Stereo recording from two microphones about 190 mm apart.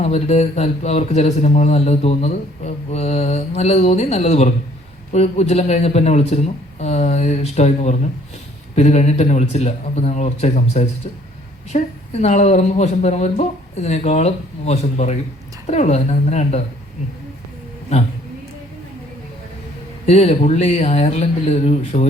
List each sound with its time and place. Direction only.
0.0 s a man's voice: 35° left (ahead or behind)
20.1 s a man's voice: 35° left (ahead or behind)